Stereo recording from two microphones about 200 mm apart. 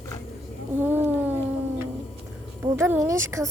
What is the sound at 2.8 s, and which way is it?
Speech, 10° right (ahead or behind).